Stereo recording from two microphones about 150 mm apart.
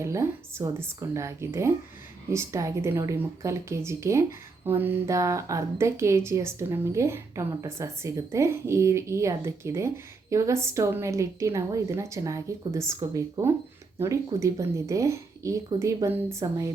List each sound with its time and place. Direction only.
0.0 s speech: 20° right (ahead or behind)